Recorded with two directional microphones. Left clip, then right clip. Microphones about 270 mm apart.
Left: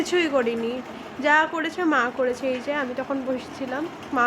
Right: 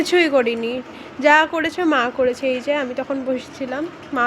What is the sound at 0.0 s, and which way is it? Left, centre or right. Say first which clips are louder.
A woman's voice: right 6 dB; centre.